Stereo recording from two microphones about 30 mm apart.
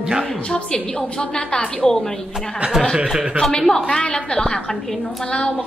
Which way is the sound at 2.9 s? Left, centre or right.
Right.